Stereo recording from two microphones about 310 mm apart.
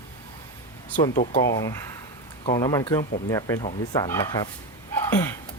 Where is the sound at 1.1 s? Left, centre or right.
Left.